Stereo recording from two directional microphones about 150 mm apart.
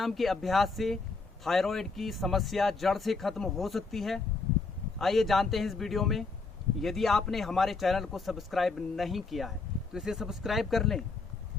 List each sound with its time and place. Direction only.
0.0 s speech: centre (ahead or behind)